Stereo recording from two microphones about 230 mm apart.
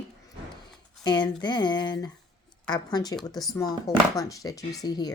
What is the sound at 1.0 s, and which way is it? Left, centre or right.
Speech, centre.